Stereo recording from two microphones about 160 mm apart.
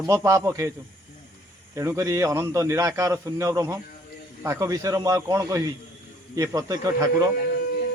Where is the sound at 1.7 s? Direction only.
20° right (ahead or behind).